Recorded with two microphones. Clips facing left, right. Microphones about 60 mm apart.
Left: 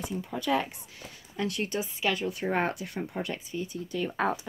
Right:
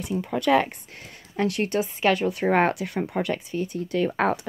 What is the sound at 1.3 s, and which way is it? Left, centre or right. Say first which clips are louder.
Speech: right 7 dB; right.